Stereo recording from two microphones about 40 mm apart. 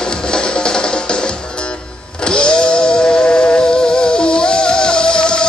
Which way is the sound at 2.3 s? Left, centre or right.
Left.